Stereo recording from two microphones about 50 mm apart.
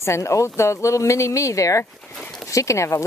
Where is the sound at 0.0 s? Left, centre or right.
Left.